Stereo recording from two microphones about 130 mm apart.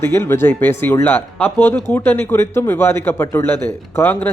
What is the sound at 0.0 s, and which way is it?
Speech, 20° left (ahead or behind).